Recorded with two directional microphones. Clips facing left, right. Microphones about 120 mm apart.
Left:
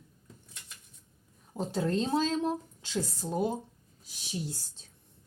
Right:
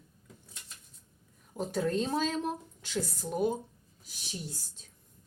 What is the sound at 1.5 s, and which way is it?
Speech, 20° left (ahead or behind).